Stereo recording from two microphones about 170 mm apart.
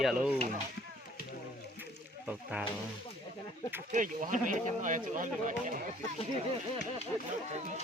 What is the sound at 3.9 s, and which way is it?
Speech, 50° right (ahead or behind).